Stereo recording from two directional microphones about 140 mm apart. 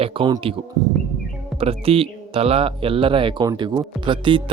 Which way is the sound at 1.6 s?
45° right (ahead or behind).